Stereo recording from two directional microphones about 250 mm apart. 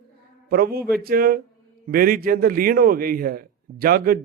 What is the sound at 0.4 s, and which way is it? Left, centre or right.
A man's voice, right.